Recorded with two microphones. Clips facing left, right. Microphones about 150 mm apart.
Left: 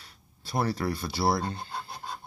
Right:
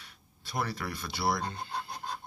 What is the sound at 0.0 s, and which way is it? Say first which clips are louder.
Speech: left 3 dB; 35° left (ahead or behind).